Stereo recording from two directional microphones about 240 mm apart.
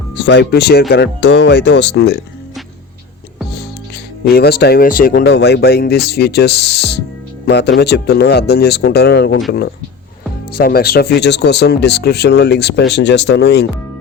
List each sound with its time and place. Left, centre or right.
0.2 s speech: left
4.2 s speech: left